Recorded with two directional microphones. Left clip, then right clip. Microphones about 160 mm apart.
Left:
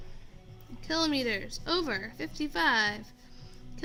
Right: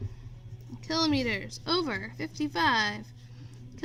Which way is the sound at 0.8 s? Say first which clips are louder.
Right 1 dB; 20° right (ahead or behind).